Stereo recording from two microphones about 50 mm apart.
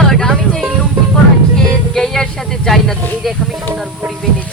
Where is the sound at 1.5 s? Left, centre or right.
Centre.